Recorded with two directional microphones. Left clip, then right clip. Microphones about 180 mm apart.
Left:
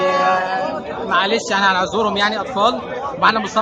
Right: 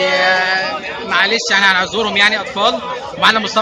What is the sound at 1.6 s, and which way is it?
Speech, 15° left (ahead or behind).